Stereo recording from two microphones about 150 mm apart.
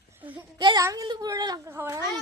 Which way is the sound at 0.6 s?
30° right (ahead or behind).